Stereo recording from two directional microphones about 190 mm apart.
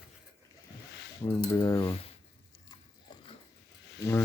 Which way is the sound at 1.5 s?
15° left (ahead or behind).